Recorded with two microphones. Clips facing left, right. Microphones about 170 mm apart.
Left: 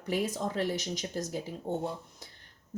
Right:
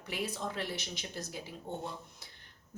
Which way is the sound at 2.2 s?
45° left (ahead or behind).